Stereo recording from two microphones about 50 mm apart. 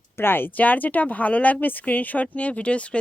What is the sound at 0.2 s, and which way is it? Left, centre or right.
Speech, left.